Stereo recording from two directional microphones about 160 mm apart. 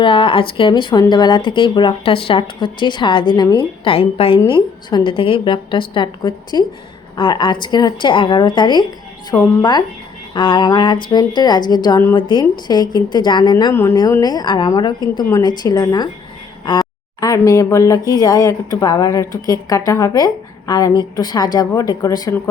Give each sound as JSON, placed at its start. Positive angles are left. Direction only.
{"t": 0.0, "sound": "a woman's voice", "side_deg": 35}
{"t": 9.3, "sound": "speech", "side_deg": 15}
{"t": 10.3, "sound": "a woman's voice", "side_deg": 30}